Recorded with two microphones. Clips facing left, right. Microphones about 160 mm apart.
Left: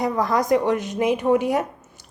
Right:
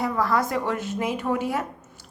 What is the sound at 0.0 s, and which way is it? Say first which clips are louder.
A woman's voice: left 2 dB; 15° left (ahead or behind).